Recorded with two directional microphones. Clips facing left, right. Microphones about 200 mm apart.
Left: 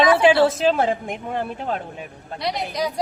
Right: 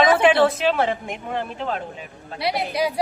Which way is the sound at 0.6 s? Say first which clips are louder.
Left 2 dB; 40° left (ahead or behind).